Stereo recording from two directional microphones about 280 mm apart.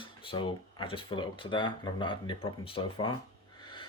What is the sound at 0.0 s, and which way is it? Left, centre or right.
Speech, centre.